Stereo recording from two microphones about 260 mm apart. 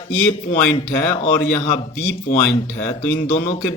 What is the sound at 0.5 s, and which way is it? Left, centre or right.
A man's voice, left.